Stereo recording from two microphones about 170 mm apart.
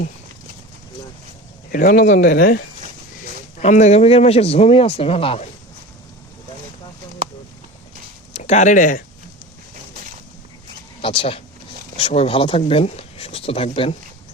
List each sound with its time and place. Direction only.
1.7 s speech: 55° left (ahead or behind)
3.6 s speech: 45° left (ahead or behind)
8.3 s speech: 40° left (ahead or behind)
11.0 s speech: 30° left (ahead or behind)